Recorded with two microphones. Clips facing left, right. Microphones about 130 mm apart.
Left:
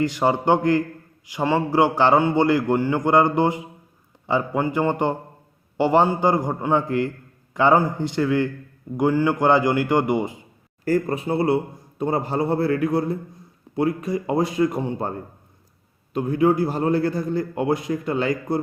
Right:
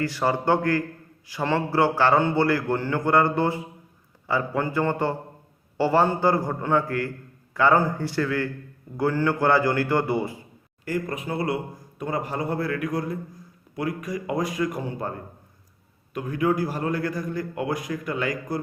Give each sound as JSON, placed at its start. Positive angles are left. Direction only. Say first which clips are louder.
{"t": 0.0, "sound": "a man's voice", "louder": "left 4 dB", "side_deg": 20}
{"t": 10.8, "sound": "a man's voice", "louder": "left 7 dB", "side_deg": 35}
{"t": 16.1, "sound": "a man's voice", "louder": "left 5 dB", "side_deg": 30}